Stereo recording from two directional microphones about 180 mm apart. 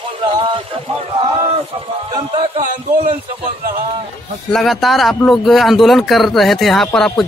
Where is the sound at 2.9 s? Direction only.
45° right (ahead or behind).